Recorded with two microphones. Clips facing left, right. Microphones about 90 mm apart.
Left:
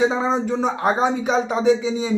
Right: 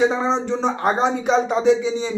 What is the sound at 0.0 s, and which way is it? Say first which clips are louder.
Speech: even; 10° left (ahead or behind).